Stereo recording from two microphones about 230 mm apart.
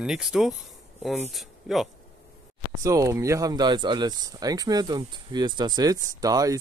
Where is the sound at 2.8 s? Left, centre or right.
Centre.